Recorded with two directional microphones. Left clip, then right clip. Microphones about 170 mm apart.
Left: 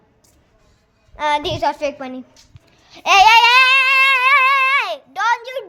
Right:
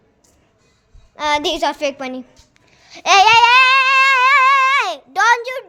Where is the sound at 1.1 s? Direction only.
30° right (ahead or behind).